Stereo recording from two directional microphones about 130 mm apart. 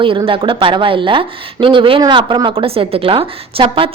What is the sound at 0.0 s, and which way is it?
Speech, 40° right (ahead or behind).